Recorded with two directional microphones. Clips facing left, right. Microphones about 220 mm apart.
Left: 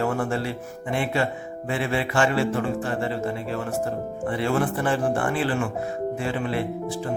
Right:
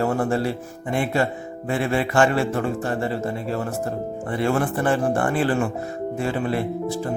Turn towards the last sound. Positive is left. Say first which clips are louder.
# right 3 dB
turn(degrees=-40)  # may be behind; listen again after turning